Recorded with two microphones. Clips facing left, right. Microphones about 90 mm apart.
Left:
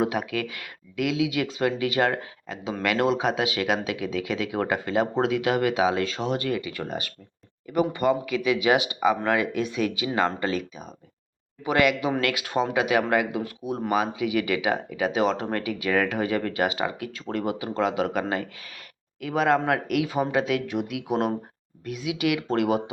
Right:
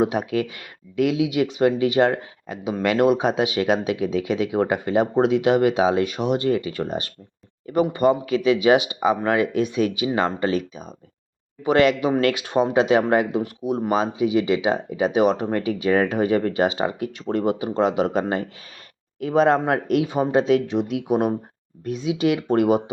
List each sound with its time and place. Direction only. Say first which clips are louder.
0.0 s speech: right 4 dB; 25° right (ahead or behind)
21.8 s speech: right 5 dB; 30° right (ahead or behind)